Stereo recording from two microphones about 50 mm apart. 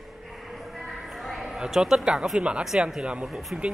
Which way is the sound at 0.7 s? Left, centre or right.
Centre.